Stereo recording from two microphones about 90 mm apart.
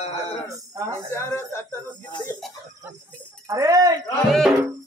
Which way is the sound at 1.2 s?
30° left (ahead or behind).